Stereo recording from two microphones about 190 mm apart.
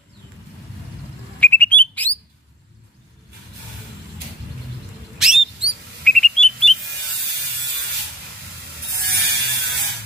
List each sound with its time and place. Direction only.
1.4 s bird: 10° left (ahead or behind)
5.2 s a sound: 5° right (ahead or behind)
8.9 s mechanisms: 60° right (ahead or behind)